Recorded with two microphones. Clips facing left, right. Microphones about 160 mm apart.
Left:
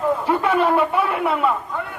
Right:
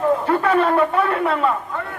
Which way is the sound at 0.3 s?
10° left (ahead or behind).